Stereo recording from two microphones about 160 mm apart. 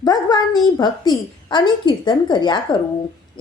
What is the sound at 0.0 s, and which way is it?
A woman's voice, 25° left (ahead or behind).